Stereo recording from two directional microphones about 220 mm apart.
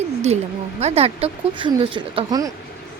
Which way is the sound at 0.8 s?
30° right (ahead or behind).